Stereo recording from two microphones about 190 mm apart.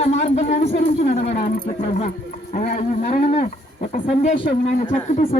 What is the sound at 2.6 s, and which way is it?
Speech, 40° left (ahead or behind).